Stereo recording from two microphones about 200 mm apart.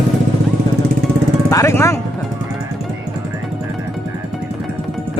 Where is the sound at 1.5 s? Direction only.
15° left (ahead or behind).